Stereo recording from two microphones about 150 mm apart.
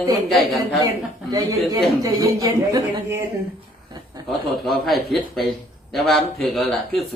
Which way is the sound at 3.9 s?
25° right (ahead or behind).